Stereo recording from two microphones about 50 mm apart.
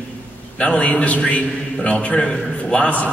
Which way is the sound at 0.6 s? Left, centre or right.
Left.